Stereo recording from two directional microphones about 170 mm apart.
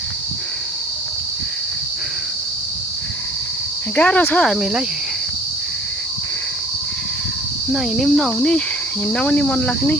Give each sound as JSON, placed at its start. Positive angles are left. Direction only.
{"t": 3.9, "sound": "speech", "side_deg": 10}
{"t": 7.7, "sound": "speech", "side_deg": 0}